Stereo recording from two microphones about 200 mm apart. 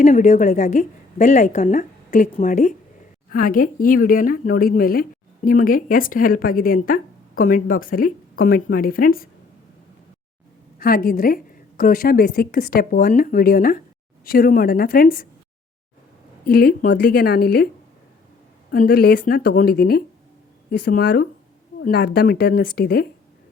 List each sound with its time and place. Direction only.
0.0 s a woman's voice: 35° left (ahead or behind)
10.8 s speech: 45° left (ahead or behind)
16.5 s speech: 50° left (ahead or behind)
18.7 s speech: 50° left (ahead or behind)